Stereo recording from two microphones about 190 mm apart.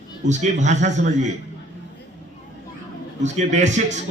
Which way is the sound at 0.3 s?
40° right (ahead or behind).